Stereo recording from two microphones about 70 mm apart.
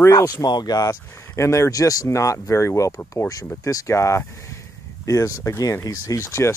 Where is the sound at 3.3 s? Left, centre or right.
Left.